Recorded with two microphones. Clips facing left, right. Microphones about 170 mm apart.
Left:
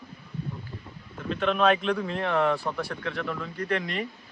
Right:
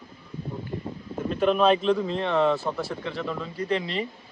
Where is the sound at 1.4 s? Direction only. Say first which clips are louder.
Right 3 dB; 5° right (ahead or behind).